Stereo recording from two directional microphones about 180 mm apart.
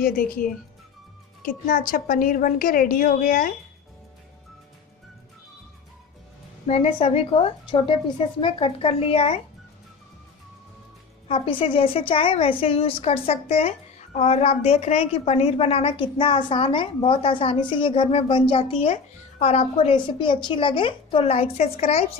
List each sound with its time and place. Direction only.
0.0 s a woman's voice: 50° left (ahead or behind)
6.7 s a woman's voice: 30° left (ahead or behind)
11.2 s a woman's voice: 30° left (ahead or behind)